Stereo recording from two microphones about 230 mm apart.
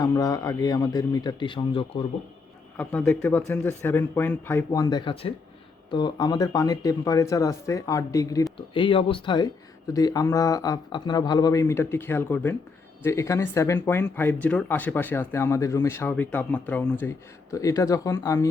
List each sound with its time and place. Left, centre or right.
0.0 s speech: centre
2.7 s speech: centre